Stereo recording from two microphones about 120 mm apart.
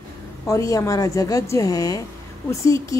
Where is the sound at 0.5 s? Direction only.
25° left (ahead or behind).